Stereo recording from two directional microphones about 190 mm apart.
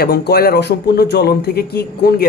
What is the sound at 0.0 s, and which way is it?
A man's voice, 55° left (ahead or behind).